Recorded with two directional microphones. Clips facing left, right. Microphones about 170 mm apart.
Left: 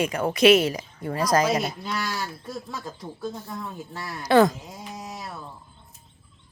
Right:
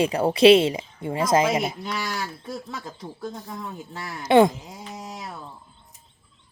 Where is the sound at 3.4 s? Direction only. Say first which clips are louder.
Even; 15° right (ahead or behind).